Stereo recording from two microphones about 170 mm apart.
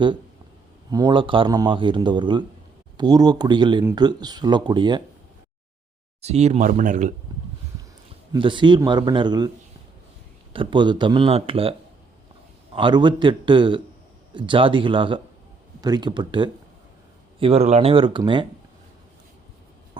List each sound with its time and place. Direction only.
0.9 s speech: 25° right (ahead or behind)
6.2 s speech: 40° right (ahead or behind)
8.3 s speech: 30° right (ahead or behind)
10.5 s speech: 30° right (ahead or behind)
12.7 s speech: 30° right (ahead or behind)
17.4 s speech: 40° right (ahead or behind)